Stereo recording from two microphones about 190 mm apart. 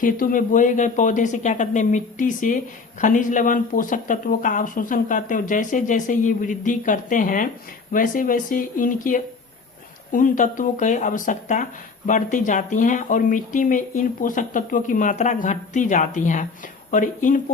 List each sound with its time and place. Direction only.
0.0 s speech: 45° left (ahead or behind)